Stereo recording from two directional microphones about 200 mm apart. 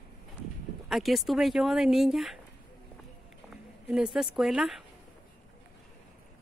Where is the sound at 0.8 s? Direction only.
Centre (ahead or behind).